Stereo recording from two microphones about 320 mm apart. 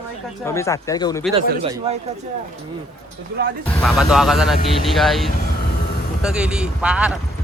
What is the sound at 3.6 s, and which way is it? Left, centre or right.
Speech, centre.